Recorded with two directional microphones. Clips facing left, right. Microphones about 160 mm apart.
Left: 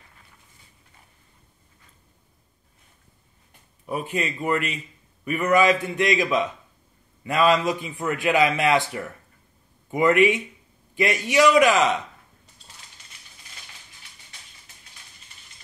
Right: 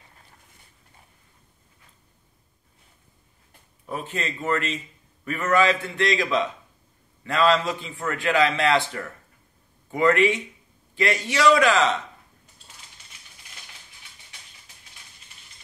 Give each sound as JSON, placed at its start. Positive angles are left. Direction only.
{"t": 3.8, "sound": "a man's voice", "side_deg": 15}
{"t": 9.8, "sound": "a man's voice", "side_deg": 15}